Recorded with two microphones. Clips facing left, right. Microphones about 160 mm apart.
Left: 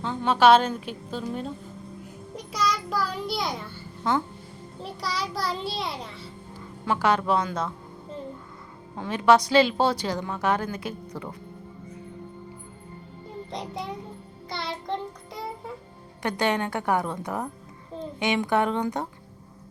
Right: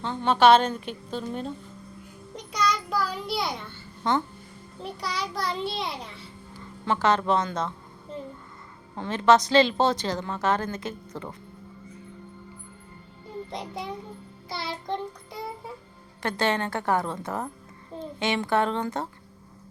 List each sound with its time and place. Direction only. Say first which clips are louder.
0.0 s a child's voice: even; 5° left (ahead or behind)
9.0 s a woman's voice: even; 10° left (ahead or behind)
13.5 s a child's voice: left 2 dB; centre (ahead or behind)
14.5 s child singing: even; centre (ahead or behind)
16.2 s a woman's voice: left 1 dB; 15° left (ahead or behind)